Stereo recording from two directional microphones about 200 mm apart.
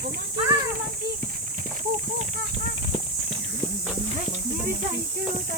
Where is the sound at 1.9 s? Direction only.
35° right (ahead or behind).